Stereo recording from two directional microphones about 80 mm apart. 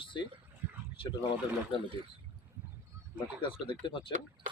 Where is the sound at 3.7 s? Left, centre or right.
Left.